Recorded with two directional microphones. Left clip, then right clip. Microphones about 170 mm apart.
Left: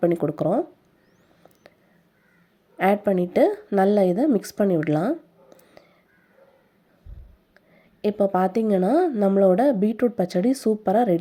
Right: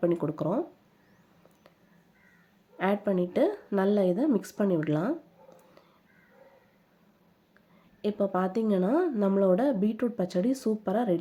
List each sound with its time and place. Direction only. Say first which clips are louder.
0.0 s a woman's voice: left 6 dB; 25° left (ahead or behind)
2.7 s a woman's voice: left 7 dB; 30° left (ahead or behind)
8.0 s a woman's voice: left 7 dB; 30° left (ahead or behind)